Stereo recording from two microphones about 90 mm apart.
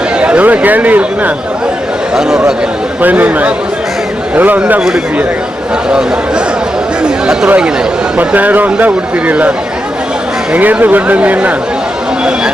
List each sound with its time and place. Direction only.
0.2 s speech: 15° right (ahead or behind)
2.1 s speech: 5° right (ahead or behind)
3.0 s speech: 20° right (ahead or behind)
7.3 s speech: 10° right (ahead or behind)
10.5 s speech: 20° right (ahead or behind)